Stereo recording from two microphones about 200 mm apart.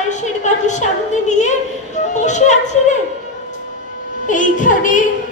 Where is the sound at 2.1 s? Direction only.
35° left (ahead or behind).